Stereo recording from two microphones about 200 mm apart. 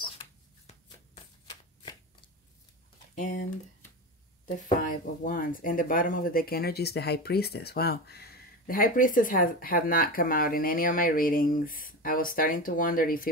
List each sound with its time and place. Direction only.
0.7 s shuffling cards: 35° left (ahead or behind)
3.2 s speech: 40° left (ahead or behind)
4.8 s speech: 45° left (ahead or behind)